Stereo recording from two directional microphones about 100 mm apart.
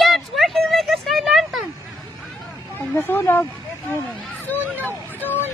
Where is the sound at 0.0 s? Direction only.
Centre (ahead or behind).